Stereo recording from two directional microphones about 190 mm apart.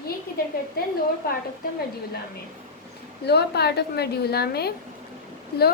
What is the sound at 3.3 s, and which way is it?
A woman's voice, 60° left (ahead or behind).